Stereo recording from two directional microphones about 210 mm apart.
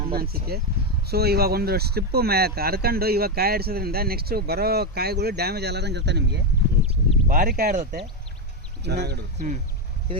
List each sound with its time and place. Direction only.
0.1 s speech: 45° right (ahead or behind)
7.3 s speech: 40° right (ahead or behind)